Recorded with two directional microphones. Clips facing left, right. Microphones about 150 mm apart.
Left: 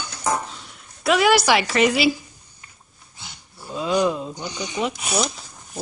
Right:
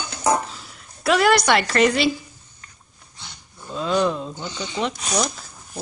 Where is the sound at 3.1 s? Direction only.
5° left (ahead or behind).